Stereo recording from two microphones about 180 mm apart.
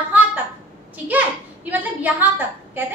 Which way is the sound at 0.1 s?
10° right (ahead or behind).